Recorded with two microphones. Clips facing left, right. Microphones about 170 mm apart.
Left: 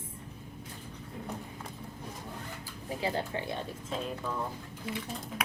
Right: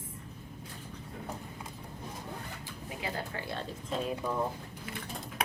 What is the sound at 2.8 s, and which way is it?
Speech, 30° left (ahead or behind).